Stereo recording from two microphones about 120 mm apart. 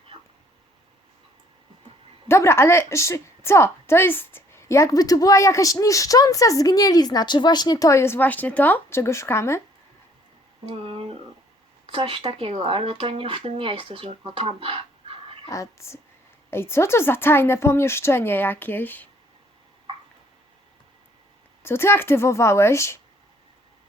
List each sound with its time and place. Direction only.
2.2 s a woman's voice: 20° left (ahead or behind)
11.9 s speech: 50° right (ahead or behind)
15.4 s a woman's voice: 25° left (ahead or behind)
21.6 s a woman's voice: 20° left (ahead or behind)